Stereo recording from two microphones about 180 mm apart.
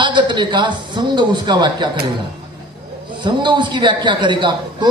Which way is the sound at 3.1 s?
25° right (ahead or behind).